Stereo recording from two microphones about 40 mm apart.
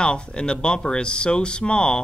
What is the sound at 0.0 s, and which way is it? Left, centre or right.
Speech, left.